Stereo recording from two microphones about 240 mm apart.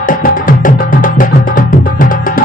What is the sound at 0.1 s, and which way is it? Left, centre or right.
Music, left.